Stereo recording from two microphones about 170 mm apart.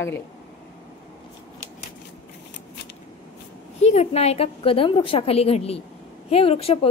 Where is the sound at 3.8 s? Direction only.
40° left (ahead or behind).